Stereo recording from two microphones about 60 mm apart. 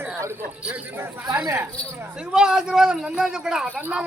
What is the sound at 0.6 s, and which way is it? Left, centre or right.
Speech, right.